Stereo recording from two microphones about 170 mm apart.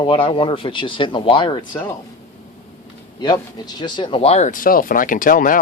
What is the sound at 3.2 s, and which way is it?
Speech, 25° left (ahead or behind).